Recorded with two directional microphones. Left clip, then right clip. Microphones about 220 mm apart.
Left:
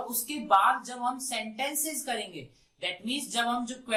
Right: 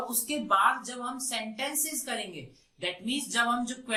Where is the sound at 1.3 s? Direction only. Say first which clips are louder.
Left 1 dB; centre (ahead or behind).